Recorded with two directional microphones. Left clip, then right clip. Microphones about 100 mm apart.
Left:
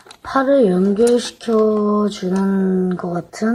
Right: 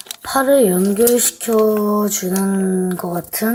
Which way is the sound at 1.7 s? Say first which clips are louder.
Even; 20° right (ahead or behind).